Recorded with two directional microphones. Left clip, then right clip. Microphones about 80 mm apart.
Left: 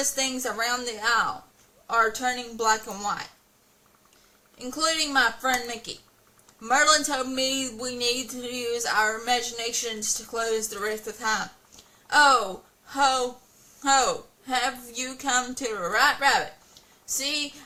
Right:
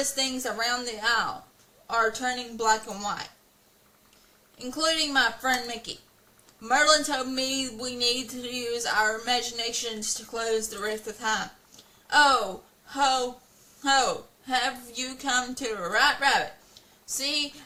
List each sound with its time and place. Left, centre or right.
0.0 s speech: left
4.5 s speech: left